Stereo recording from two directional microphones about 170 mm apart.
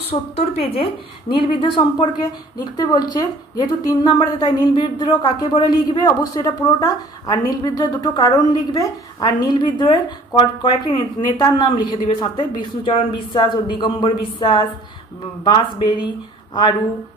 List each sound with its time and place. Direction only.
0.1 s a woman's voice: 35° left (ahead or behind)